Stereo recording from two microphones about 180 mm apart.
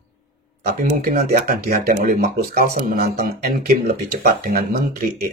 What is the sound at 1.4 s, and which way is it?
Speech, 55° right (ahead or behind).